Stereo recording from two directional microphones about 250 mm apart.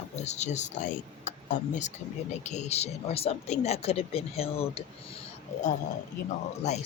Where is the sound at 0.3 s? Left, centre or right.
Left.